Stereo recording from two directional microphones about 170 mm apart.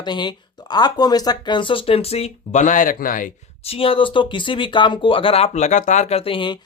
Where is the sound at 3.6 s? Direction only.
35° left (ahead or behind).